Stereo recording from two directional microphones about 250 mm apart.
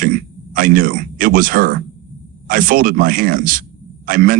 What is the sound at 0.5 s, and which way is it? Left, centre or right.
Speech, right.